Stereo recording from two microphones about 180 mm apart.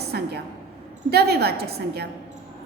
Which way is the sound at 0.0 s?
65° right (ahead or behind).